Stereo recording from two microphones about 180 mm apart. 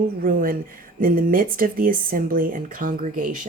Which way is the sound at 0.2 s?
50° right (ahead or behind).